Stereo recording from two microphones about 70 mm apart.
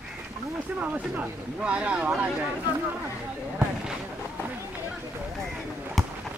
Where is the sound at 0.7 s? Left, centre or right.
Right.